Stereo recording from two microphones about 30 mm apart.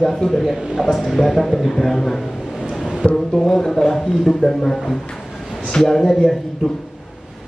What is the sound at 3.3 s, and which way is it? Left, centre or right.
A man's voice, centre.